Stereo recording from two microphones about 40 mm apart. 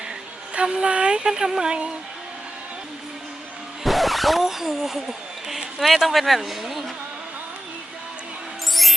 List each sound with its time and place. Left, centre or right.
0.5 s speech: right
3.8 s speech: centre
8.7 s music: centre